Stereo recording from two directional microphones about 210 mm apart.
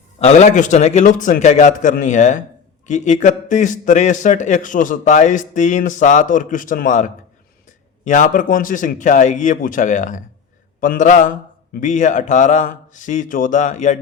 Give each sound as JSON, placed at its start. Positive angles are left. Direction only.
{"t": 0.2, "sound": "a man's voice", "side_deg": 30}